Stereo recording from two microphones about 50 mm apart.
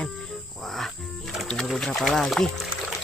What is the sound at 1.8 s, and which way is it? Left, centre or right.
Speech, centre.